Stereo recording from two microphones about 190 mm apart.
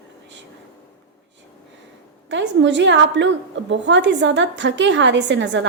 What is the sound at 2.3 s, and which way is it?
A woman's voice, 70° right (ahead or behind).